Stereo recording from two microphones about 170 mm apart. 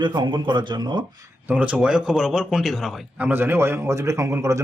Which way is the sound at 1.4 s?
10° right (ahead or behind).